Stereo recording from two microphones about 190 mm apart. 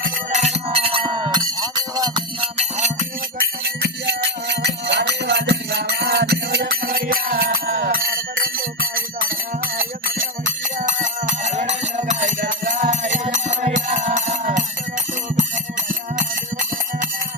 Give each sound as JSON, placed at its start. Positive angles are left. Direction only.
{"t": 0.0, "sound": "music", "side_deg": -40}
{"t": 3.6, "sound": "music", "side_deg": -65}
{"t": 15.9, "sound": "music", "side_deg": -45}